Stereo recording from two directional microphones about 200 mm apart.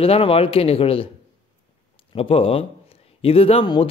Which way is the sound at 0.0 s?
30° left (ahead or behind).